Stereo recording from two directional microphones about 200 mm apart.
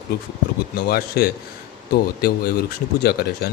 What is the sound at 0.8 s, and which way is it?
Speech, 50° left (ahead or behind).